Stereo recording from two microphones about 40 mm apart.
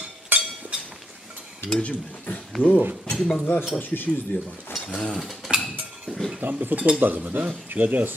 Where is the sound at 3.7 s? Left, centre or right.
Left.